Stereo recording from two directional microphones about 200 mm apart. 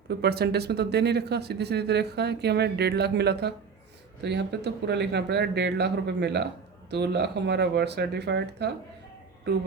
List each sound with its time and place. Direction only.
0.1 s speech: 55° right (ahead or behind)